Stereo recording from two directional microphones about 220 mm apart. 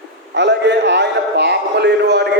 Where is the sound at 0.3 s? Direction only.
55° right (ahead or behind).